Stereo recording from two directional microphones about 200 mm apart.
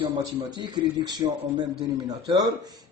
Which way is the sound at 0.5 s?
20° right (ahead or behind).